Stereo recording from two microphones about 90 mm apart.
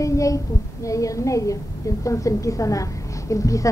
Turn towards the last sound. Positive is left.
turn(degrees=35)  # may be behind; listen again after turning